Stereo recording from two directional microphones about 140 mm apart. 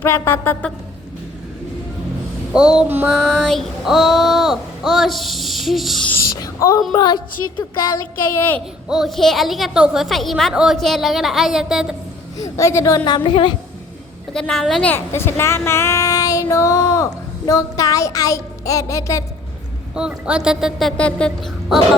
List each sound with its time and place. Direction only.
0.0 s a sound: 15° left (ahead or behind)
2.5 s a woman's voice: 5° right (ahead or behind)
6.1 s speech: 20° left (ahead or behind)
6.9 s music: 30° left (ahead or behind)
8.4 s a sound: 15° left (ahead or behind)
8.9 s a woman's voice: centre (ahead or behind)
12.4 s a woman's voice: 20° left (ahead or behind)
13.1 s music: 35° left (ahead or behind)
14.3 s a woman's voice: 5° left (ahead or behind)
14.8 s speech: 15° left (ahead or behind)
20.0 s a woman's voice: 5° right (ahead or behind)